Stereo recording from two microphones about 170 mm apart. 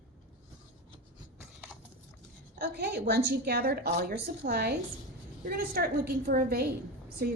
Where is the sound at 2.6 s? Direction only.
70° right (ahead or behind).